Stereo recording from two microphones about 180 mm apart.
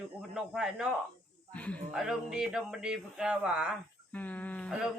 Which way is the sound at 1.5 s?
5° left (ahead or behind).